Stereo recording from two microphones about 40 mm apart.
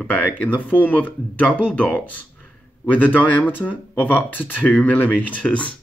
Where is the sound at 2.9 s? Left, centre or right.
Left.